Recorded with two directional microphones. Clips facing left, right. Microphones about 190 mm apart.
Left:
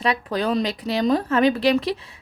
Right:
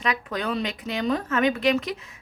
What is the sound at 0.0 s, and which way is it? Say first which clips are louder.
Speech: left 5 dB; 35° left (ahead or behind).